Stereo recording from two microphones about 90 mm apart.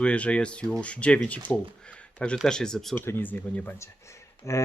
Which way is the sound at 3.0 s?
20° left (ahead or behind).